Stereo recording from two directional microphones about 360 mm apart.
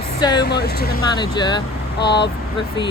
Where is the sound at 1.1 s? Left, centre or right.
Centre.